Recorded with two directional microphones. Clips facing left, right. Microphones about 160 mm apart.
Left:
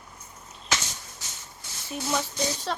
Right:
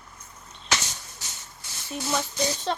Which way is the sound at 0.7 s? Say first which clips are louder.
Right 1 dB; 75° right (ahead or behind).